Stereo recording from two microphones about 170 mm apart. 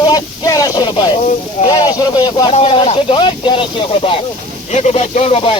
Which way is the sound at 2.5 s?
35° left (ahead or behind).